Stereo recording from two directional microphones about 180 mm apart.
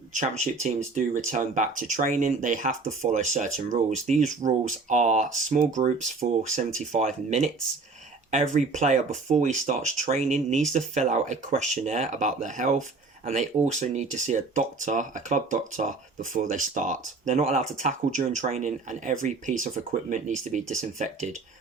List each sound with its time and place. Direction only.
0.1 s speech: 40° right (ahead or behind)